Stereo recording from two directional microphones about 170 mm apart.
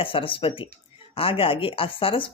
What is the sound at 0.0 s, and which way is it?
Speech, 30° left (ahead or behind).